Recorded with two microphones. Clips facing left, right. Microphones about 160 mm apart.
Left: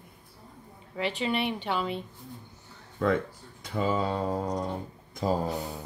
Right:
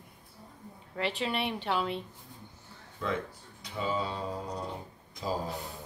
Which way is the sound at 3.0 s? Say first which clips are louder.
Left 7 dB; 50° left (ahead or behind).